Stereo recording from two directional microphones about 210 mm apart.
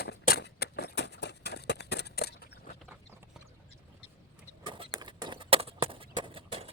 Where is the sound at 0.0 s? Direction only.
50° left (ahead or behind).